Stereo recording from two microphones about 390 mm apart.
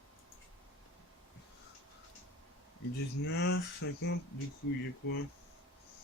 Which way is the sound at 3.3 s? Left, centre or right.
Left.